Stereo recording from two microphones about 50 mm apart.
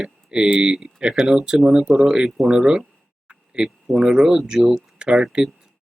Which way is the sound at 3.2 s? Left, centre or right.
Centre.